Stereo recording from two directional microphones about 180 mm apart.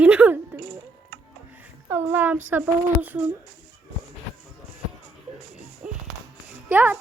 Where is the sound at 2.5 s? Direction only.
10° right (ahead or behind).